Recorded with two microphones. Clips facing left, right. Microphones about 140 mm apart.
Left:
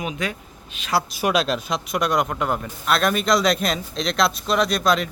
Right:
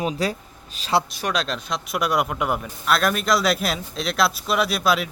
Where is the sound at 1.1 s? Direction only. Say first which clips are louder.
Left 4 dB; 5° left (ahead or behind).